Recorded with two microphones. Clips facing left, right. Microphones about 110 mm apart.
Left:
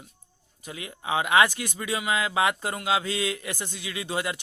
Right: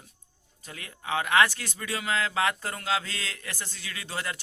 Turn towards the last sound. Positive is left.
turn(degrees=15)  # may be behind; listen again after turning